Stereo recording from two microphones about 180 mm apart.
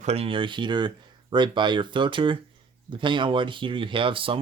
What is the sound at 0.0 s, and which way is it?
Speech, 35° right (ahead or behind).